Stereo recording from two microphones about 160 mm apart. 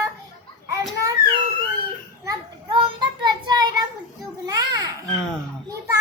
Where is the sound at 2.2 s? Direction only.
30° right (ahead or behind).